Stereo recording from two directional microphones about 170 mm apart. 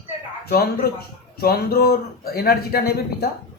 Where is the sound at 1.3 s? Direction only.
65° left (ahead or behind).